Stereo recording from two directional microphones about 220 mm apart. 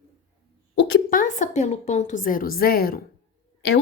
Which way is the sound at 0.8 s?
50° left (ahead or behind).